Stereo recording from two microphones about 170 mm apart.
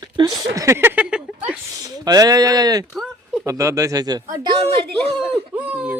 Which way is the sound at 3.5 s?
20° right (ahead or behind).